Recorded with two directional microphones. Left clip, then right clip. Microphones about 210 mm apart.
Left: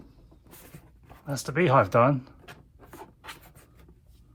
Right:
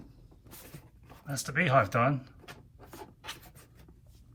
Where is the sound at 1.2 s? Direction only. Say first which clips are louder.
Left 5 dB; 20° left (ahead or behind).